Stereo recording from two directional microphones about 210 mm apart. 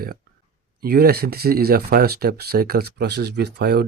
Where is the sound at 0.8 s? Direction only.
45° right (ahead or behind).